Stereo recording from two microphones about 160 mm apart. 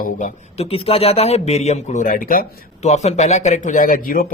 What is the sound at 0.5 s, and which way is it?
Speech, 35° left (ahead or behind).